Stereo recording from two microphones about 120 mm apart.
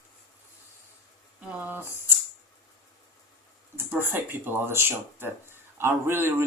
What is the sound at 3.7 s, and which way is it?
Speech, 20° right (ahead or behind).